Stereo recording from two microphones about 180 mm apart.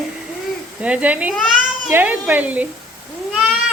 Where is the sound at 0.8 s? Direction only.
5° right (ahead or behind).